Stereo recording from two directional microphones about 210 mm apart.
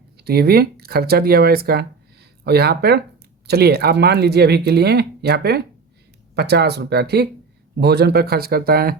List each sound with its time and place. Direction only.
0.3 s speech: 45° right (ahead or behind)